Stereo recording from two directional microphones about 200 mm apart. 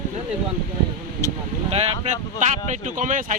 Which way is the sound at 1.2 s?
15° left (ahead or behind).